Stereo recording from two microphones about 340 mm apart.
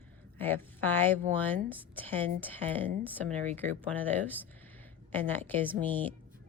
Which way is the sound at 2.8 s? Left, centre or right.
Centre.